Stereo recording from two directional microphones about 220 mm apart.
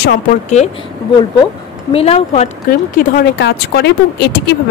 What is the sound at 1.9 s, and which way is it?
Speech, 30° left (ahead or behind).